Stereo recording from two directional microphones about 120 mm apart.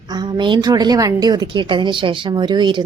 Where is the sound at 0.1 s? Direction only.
40° right (ahead or behind).